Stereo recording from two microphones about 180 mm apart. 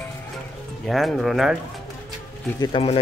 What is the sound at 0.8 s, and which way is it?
Speech, centre (ahead or behind).